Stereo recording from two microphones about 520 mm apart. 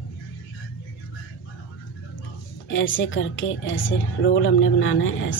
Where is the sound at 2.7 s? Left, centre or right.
Left.